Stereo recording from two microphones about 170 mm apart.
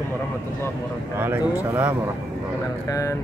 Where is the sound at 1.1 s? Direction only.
10° right (ahead or behind).